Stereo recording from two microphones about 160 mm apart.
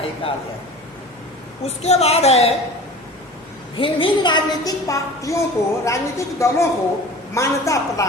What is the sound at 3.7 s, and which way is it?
A woman's voice, 30° left (ahead or behind).